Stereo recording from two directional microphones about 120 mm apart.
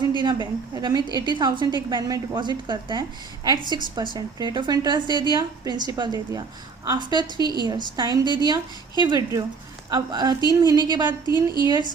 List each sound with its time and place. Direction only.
0.2 s a woman's voice: 40° right (ahead or behind)
7.3 s a woman's voice: 40° left (ahead or behind)
7.7 s a woman's voice: 40° right (ahead or behind)
8.2 s a woman's voice: 35° left (ahead or behind)
9.0 s a woman's voice: 40° right (ahead or behind)
11.3 s a woman's voice: 40° left (ahead or behind)